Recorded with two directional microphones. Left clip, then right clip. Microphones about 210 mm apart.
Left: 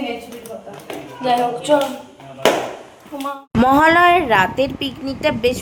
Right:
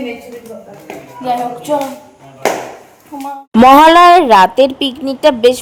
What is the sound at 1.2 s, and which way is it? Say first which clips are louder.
Speech: even; centre (ahead or behind).